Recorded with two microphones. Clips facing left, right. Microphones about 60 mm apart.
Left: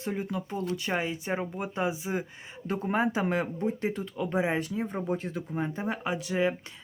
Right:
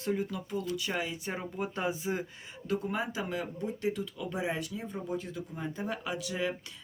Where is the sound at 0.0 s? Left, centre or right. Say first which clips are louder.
Even; left.